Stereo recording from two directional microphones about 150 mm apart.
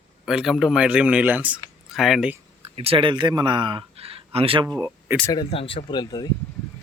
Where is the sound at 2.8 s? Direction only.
40° right (ahead or behind).